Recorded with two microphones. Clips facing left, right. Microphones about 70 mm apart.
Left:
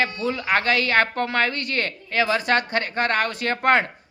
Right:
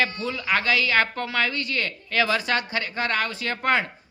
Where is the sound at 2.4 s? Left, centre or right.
Left.